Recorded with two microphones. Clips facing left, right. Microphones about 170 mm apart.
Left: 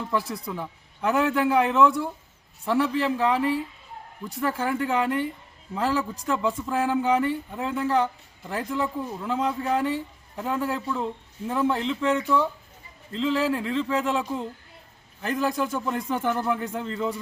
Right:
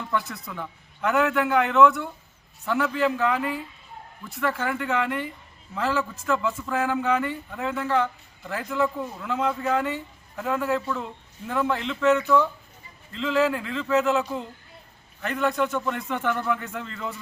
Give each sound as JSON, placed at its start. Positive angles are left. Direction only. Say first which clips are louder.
{"t": 0.0, "sound": "speech", "louder": "left 1 dB", "side_deg": 30}